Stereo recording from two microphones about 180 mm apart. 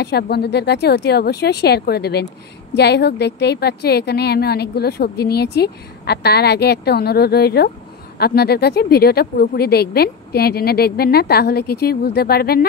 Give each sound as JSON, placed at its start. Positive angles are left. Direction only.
{"t": 0.0, "sound": "a woman's voice", "side_deg": 65}